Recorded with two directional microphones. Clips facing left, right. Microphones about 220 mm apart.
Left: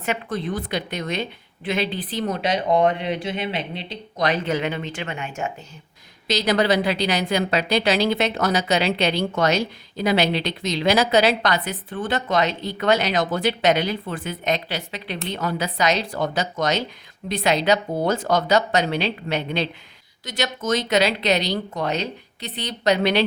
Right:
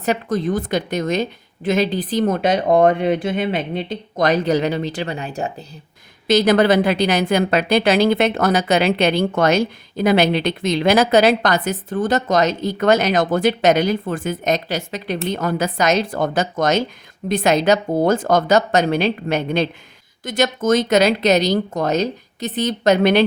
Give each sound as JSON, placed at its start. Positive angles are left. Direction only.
{"t": 0.0, "sound": "a woman's voice", "side_deg": -40}
{"t": 6.2, "sound": "a woman's voice", "side_deg": -50}